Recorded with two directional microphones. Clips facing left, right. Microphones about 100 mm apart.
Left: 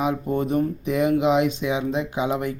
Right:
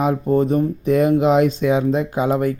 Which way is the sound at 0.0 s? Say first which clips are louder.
Right 6 dB; 40° right (ahead or behind).